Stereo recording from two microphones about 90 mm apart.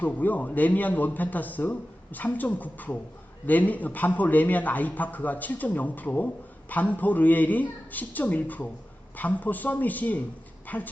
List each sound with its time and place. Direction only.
0.0 s a man's voice: 20° left (ahead or behind)